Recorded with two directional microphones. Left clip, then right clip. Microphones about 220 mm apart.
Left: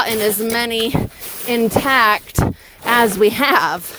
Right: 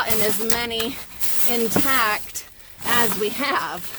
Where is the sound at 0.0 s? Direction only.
30° left (ahead or behind).